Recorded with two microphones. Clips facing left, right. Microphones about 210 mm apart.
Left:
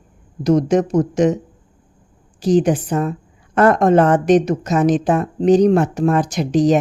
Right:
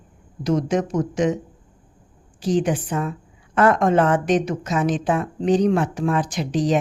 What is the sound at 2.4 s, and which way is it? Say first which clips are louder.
A woman's voice: left 6 dB; 40° left (ahead or behind).